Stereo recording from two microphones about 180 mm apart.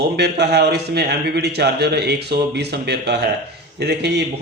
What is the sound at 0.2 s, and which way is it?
A man's voice, 70° right (ahead or behind).